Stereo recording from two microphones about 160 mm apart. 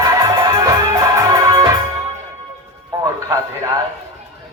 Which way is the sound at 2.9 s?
25° right (ahead or behind).